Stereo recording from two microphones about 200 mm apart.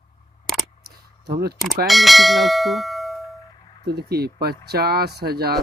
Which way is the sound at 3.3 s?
20° left (ahead or behind).